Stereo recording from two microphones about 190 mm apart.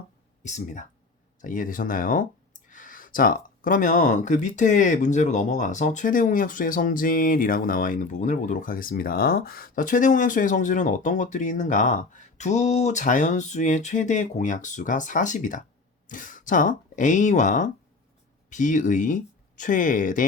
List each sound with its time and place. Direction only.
0.4 s speech: 40° left (ahead or behind)